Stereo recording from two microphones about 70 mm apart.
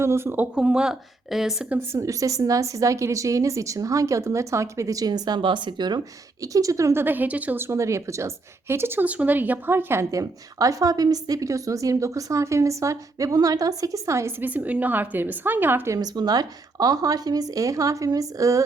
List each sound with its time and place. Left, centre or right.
0.0 s speech: right
0.5 s speech: centre
1.9 s a woman's voice: right
6.4 s a woman's voice: right
6.9 s a woman's voice: right
7.7 s a woman's voice: right
9.0 s a woman's voice: right
10.1 s a woman's voice: right
14.4 s a woman's voice: right
16.0 s speech: right